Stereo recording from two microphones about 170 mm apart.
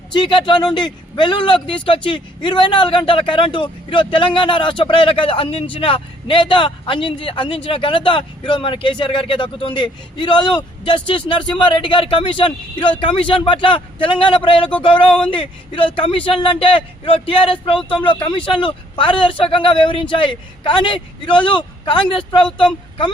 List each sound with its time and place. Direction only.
0.1 s a man's voice: 30° left (ahead or behind)